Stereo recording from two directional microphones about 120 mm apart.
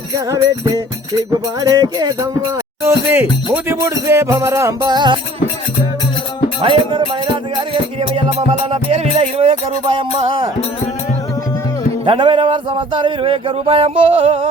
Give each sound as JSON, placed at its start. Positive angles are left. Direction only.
{"t": 1.6, "sound": "music", "side_deg": -30}
{"t": 2.8, "sound": "speech", "side_deg": -15}
{"t": 4.9, "sound": "music", "side_deg": -40}
{"t": 6.6, "sound": "music", "side_deg": -45}
{"t": 12.0, "sound": "music", "side_deg": -45}